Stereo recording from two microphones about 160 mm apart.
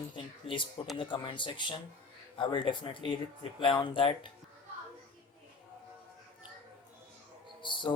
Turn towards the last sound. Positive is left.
turn(degrees=30)  # may be behind; listen again after turning